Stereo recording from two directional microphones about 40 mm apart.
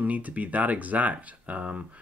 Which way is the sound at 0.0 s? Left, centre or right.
Right.